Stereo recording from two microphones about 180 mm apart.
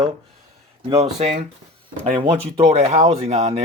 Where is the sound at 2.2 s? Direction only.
30° right (ahead or behind).